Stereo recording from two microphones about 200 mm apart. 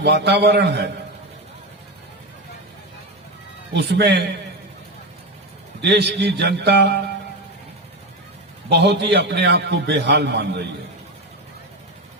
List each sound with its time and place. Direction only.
0.0 s a man's voice: 55° right (ahead or behind)
3.8 s a man's voice: 55° right (ahead or behind)
5.8 s a man's voice: 55° right (ahead or behind)
8.7 s a man's voice: 55° right (ahead or behind)